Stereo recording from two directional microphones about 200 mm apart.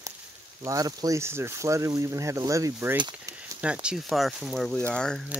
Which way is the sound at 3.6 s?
5° right (ahead or behind).